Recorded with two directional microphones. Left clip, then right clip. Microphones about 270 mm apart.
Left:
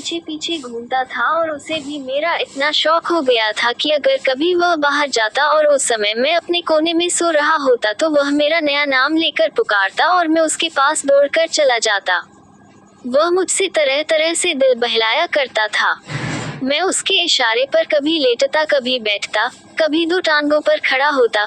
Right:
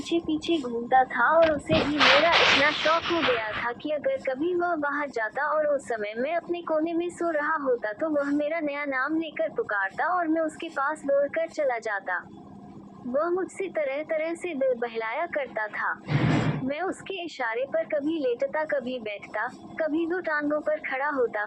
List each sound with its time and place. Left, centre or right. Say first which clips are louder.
0.1 s a woman's voice: left 3 dB; left
2.2 s speech: left 2 dB; left